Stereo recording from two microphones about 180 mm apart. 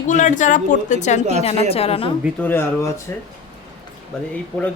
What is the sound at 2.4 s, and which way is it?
Speech, 15° left (ahead or behind).